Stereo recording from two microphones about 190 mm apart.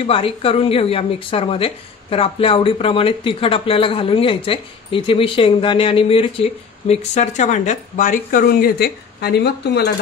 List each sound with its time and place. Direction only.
0.0 s a woman's voice: 30° left (ahead or behind); by 9.8 s 60° left (ahead or behind)